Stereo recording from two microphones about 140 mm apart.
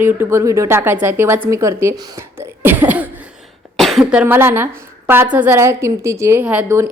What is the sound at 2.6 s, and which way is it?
Cough, 15° right (ahead or behind).